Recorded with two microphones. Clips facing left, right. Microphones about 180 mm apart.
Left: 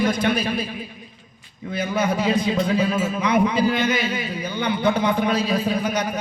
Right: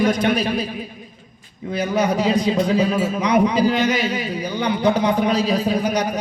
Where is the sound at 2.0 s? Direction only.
40° right (ahead or behind).